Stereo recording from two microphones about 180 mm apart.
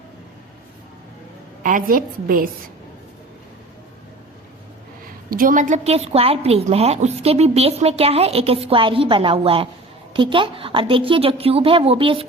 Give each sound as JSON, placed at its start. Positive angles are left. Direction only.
{"t": 1.6, "sound": "a woman's voice", "side_deg": -50}
{"t": 5.3, "sound": "a woman's voice", "side_deg": -50}